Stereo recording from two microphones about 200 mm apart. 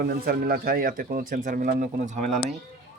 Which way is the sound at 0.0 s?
50° right (ahead or behind).